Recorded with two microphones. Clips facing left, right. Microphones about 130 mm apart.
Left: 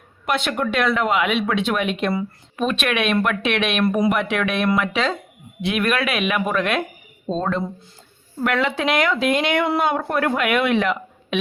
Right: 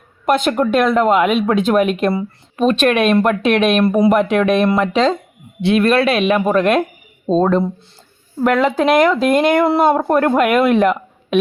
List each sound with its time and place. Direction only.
0.3 s speech: 45° right (ahead or behind)
3.8 s speech: 30° right (ahead or behind)
4.1 s speech: 40° right (ahead or behind)
8.4 s speech: 40° right (ahead or behind)